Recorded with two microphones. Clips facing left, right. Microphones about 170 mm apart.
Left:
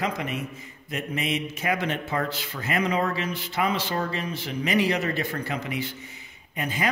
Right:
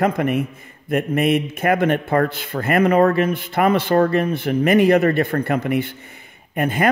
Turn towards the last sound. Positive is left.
turn(degrees=-55)  # may be behind; listen again after turning